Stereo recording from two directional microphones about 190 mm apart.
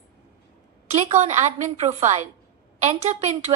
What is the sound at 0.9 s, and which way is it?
A woman's voice, 35° right (ahead or behind).